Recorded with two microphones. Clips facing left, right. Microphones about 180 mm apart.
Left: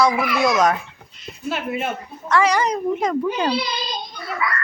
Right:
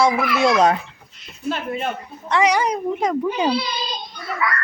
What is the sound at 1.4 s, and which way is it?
Speech, 5° left (ahead or behind).